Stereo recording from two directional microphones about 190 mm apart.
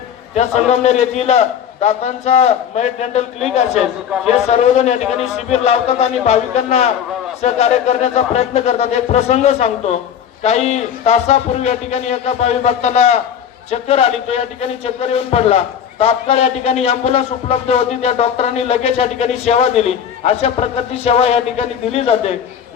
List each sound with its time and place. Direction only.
0.3 s speech: 35° left (ahead or behind)
4.4 s speech: 35° left (ahead or behind)